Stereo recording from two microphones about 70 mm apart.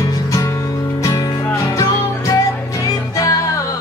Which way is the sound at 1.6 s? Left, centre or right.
Left.